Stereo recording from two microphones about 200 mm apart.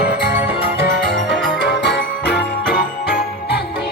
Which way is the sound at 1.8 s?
60° left (ahead or behind).